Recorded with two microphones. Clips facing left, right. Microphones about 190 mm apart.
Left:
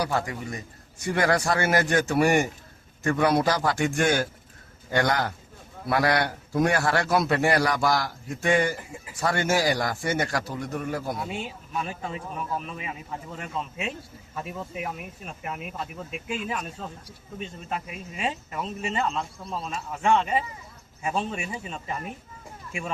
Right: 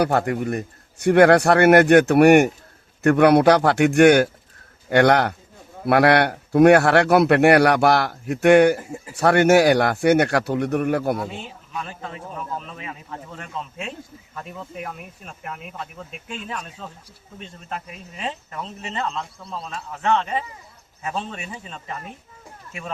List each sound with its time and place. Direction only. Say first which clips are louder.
0.0 s a man's voice: right 8 dB; 60° right (ahead or behind)
11.4 s speech: left 1 dB; 10° left (ahead or behind)